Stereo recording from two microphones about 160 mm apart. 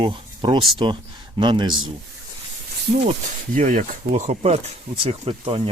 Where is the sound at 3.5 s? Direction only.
55° right (ahead or behind); by 5.7 s 35° right (ahead or behind).